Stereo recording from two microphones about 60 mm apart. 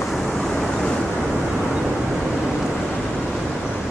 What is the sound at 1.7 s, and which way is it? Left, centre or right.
Vehicle, centre.